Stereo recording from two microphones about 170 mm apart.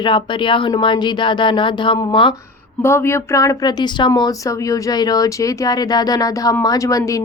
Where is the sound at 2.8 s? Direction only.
15° left (ahead or behind).